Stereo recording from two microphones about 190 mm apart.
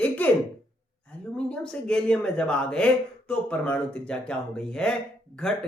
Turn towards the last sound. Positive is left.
turn(degrees=5)  # may be behind; listen again after turning